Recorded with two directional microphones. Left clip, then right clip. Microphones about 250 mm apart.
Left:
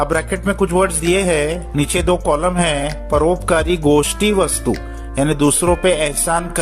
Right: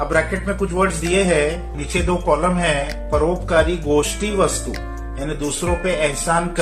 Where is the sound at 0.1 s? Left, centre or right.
Left.